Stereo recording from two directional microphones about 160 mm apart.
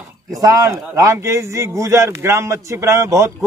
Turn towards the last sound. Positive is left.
turn(degrees=-15)  # may be behind; listen again after turning